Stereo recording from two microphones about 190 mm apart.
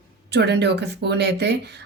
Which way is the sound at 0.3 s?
60° right (ahead or behind).